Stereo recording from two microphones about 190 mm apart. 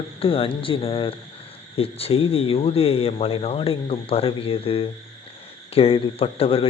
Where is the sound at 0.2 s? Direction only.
30° left (ahead or behind).